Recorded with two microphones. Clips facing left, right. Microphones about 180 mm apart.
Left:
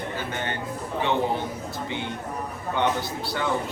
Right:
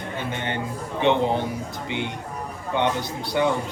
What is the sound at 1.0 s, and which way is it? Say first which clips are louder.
Speech: right 4 dB; 20° right (ahead or behind).